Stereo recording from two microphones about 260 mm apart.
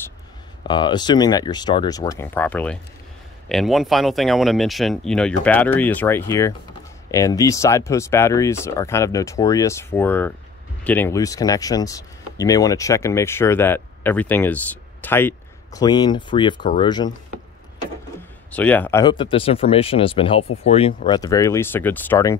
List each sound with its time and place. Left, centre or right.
0.7 s speech: centre
18.5 s speech: centre